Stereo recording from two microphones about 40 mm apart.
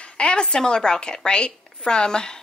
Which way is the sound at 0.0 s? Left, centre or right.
Left.